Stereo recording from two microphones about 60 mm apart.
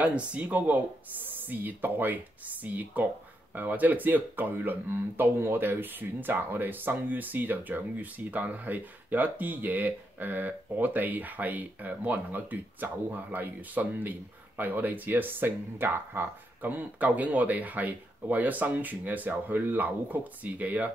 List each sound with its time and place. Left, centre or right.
0.0 s speech: right